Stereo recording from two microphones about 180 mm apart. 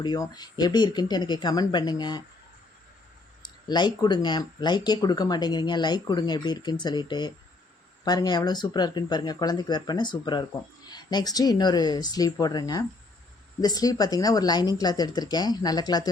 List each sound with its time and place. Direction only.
0.0 s speech: 25° left (ahead or behind)
3.4 s speech: 25° left (ahead or behind)